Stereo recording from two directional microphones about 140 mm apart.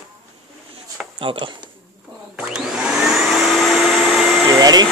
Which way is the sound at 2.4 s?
5° right (ahead or behind).